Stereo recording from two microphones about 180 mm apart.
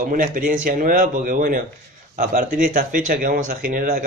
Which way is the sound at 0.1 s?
50° right (ahead or behind).